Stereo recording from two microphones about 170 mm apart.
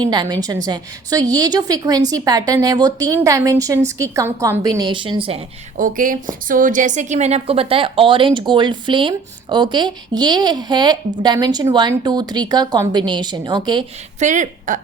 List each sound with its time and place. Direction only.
0.0 s a woman's voice: 25° right (ahead or behind)
5.7 s a woman's voice: 50° right (ahead or behind); by 13.8 s 25° right (ahead or behind)
14.2 s a woman's voice: 45° right (ahead or behind)